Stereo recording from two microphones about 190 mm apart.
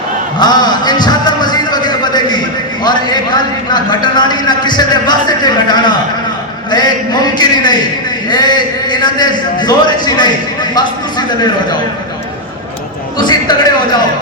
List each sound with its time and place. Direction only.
0.3 s music: 20° left (ahead or behind)
2.8 s a man's voice: 20° left (ahead or behind)
13.1 s a man's voice: 20° left (ahead or behind)